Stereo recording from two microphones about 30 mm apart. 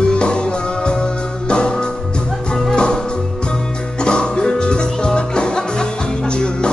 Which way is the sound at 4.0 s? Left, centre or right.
Left.